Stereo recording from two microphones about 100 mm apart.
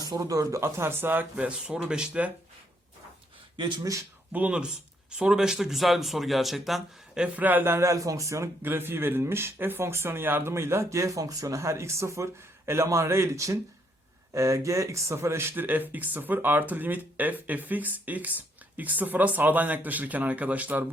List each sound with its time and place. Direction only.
0.0 s speech: 35° right (ahead or behind); by 2.3 s 10° right (ahead or behind)
3.6 s speech: 50° right (ahead or behind)
4.3 s speech: 15° right (ahead or behind)